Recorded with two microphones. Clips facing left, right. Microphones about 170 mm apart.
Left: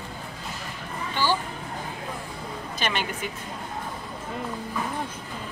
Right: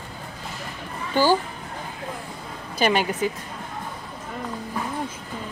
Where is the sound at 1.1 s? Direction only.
45° right (ahead or behind).